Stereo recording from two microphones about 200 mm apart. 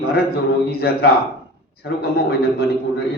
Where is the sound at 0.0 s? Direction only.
50° left (ahead or behind).